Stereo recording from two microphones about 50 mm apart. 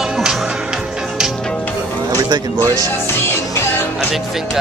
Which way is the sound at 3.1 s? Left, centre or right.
Left.